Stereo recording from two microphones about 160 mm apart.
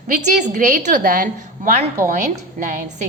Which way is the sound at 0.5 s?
55° right (ahead or behind).